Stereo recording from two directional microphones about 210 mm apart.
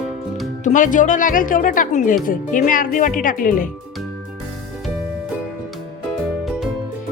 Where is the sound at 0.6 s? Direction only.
40° left (ahead or behind).